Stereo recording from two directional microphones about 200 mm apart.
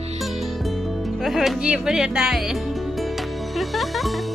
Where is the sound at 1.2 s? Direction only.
Centre (ahead or behind).